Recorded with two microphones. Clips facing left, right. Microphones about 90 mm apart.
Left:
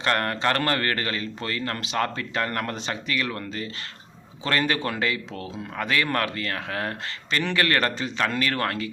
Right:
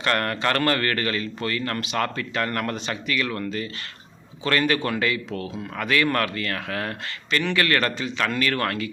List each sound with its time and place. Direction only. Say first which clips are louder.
0.0 s speech: even; 25° left (ahead or behind)